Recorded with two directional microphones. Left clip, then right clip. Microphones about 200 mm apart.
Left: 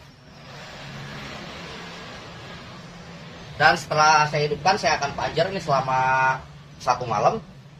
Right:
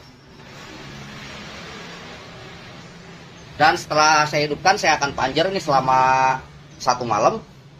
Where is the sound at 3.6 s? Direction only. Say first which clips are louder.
Right 2 dB; 40° right (ahead or behind).